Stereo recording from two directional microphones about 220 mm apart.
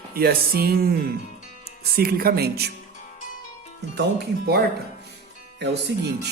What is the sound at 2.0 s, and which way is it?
Speech, 45° right (ahead or behind).